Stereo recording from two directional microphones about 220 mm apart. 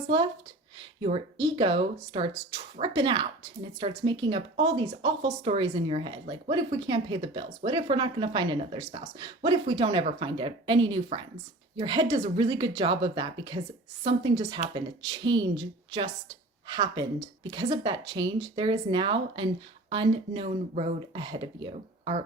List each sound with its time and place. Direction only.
1.0 s speech: 25° right (ahead or behind)
16.6 s speech: 20° right (ahead or behind)